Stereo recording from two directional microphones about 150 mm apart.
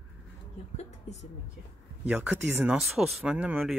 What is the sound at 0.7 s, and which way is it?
Speech, 50° left (ahead or behind).